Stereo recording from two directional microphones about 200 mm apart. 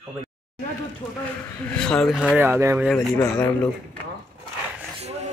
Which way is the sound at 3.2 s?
10° left (ahead or behind).